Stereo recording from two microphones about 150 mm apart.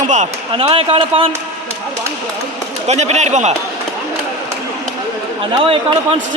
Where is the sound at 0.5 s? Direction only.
40° right (ahead or behind).